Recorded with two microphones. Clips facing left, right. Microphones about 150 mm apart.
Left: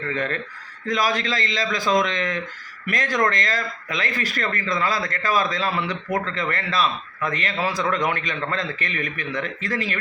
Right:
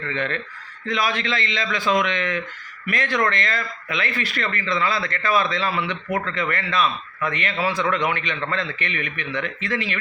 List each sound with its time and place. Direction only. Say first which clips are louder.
0.1 s a man's voice: even; 40° left (ahead or behind)